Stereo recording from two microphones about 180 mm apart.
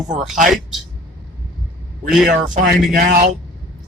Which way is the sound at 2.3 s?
55° right (ahead or behind).